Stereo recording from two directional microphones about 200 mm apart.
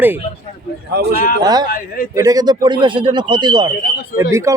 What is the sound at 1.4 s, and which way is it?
Speech, 20° right (ahead or behind).